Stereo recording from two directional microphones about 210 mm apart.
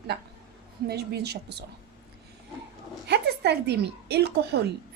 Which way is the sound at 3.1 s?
50° right (ahead or behind).